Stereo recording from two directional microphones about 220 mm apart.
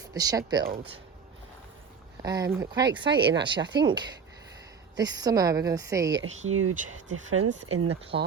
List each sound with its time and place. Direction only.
0.0 s speech: 15° right (ahead or behind)
2.2 s a woman's voice: 15° right (ahead or behind)
6.2 s speech: 65° right (ahead or behind)
8.1 s speech: 55° right (ahead or behind)